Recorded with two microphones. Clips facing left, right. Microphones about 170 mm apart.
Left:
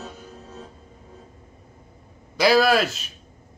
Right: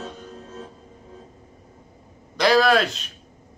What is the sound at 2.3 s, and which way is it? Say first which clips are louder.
Music: even; 5° left (ahead or behind).